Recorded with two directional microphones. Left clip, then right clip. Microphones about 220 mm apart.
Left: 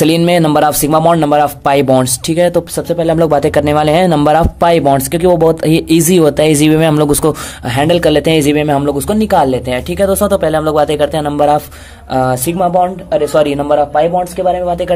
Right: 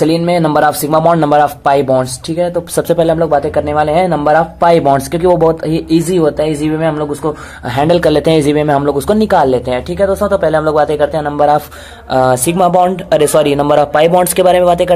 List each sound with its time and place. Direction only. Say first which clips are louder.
0.0 s speech: left 1 dB; 30° left (ahead or behind)
2.7 s a man's voice: right 2 dB; 10° left (ahead or behind)
3.2 s a man's voice: left 2 dB; 30° left (ahead or behind)
4.6 s speech: right 2 dB; 20° left (ahead or behind)
6.1 s a man's voice: left 3 dB; 35° left (ahead or behind)
7.7 s a man's voice: even; 20° left (ahead or behind)
9.9 s speech: left 1 dB; 35° left (ahead or behind)
12.1 s speech: right 3 dB; 15° left (ahead or behind)
13.7 s a man's voice: right 2 dB; 10° right (ahead or behind)